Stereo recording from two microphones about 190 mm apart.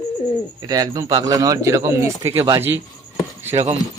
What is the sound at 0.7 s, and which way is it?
Speech, 20° right (ahead or behind).